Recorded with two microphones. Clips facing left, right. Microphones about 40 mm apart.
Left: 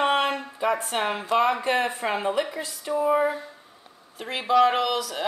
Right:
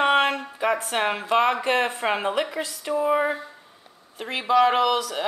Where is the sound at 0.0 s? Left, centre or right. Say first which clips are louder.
Right 3 dB; centre.